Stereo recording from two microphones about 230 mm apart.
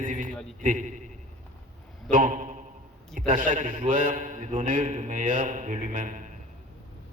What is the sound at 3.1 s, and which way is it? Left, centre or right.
A man's voice, right.